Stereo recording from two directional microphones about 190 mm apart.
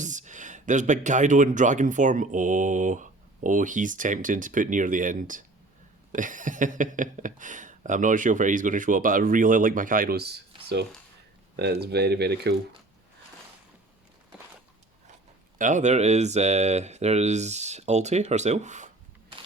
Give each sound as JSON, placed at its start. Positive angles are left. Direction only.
{"t": 0.0, "sound": "speech", "side_deg": -40}
{"t": 15.5, "sound": "speech", "side_deg": -40}